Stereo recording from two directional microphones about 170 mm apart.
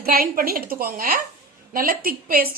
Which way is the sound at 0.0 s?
60° right (ahead or behind).